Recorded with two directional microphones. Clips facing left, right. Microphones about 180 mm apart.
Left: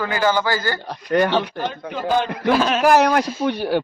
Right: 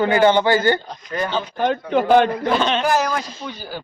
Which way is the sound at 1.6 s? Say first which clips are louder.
Right 7 dB; 60° right (ahead or behind).